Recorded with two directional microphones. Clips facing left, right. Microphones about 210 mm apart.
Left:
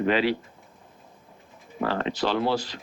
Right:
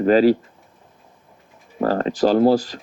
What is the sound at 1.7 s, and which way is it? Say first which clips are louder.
Speech: right 7 dB; 40° right (ahead or behind).